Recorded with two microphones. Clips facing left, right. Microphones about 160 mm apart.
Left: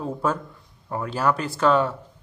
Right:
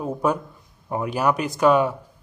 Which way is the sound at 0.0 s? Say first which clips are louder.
Right 3 dB; 15° right (ahead or behind).